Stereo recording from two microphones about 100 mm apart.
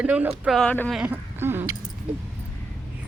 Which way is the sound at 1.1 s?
20° right (ahead or behind).